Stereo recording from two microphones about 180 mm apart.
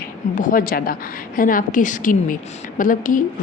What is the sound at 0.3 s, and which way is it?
A woman's voice, 50° left (ahead or behind).